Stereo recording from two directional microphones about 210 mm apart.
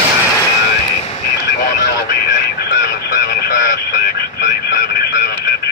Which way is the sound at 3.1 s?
50° left (ahead or behind).